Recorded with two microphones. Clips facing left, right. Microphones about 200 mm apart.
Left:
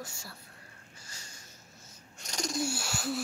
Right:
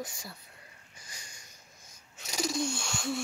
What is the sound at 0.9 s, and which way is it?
Sniff, 15° right (ahead or behind).